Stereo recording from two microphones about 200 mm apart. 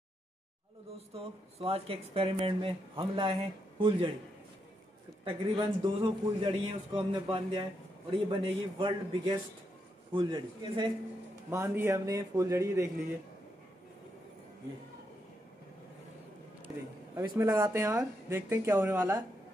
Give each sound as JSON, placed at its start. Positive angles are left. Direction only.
{"t": 0.9, "sound": "speech", "side_deg": -30}
{"t": 5.2, "sound": "speech", "side_deg": -25}
{"t": 16.6, "sound": "speech", "side_deg": -15}